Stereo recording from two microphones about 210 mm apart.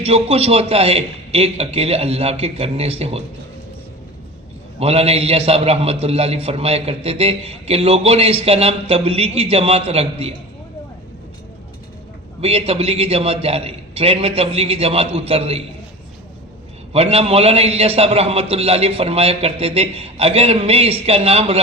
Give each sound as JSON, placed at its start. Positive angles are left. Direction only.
{"t": 0.0, "sound": "a man's voice", "side_deg": -30}
{"t": 4.8, "sound": "a man's voice", "side_deg": -30}
{"t": 12.4, "sound": "a man's voice", "side_deg": -30}
{"t": 16.9, "sound": "a man's voice", "side_deg": -30}